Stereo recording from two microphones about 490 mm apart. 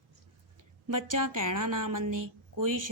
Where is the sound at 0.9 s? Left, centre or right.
Right.